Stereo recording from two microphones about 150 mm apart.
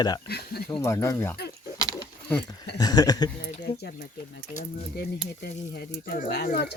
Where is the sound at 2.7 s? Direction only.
25° left (ahead or behind).